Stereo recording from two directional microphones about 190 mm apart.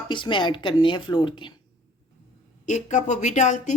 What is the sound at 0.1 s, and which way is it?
A woman's voice, 25° left (ahead or behind).